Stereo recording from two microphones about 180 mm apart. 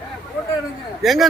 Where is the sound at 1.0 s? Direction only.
Centre (ahead or behind).